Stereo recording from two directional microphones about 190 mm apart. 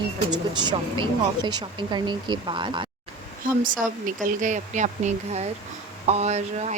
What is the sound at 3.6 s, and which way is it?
Speech, 45° right (ahead or behind).